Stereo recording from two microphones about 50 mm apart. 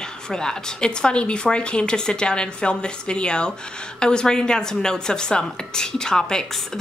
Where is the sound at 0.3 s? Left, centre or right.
Centre.